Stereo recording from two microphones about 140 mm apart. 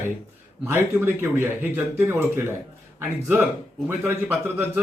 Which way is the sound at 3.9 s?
15° right (ahead or behind).